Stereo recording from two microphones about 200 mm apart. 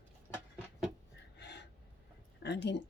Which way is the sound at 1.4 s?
55° left (ahead or behind).